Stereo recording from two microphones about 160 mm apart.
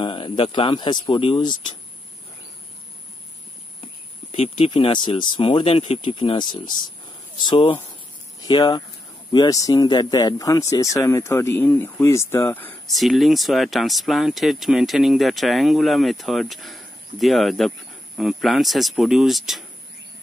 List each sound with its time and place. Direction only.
0.0 s speech: 30° left (ahead or behind)
4.3 s speech: 35° left (ahead or behind); by 12.7 s 15° left (ahead or behind)
12.8 s speech: centre (ahead or behind)